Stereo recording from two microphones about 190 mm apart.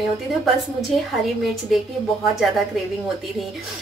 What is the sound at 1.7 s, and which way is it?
Speech, centre (ahead or behind).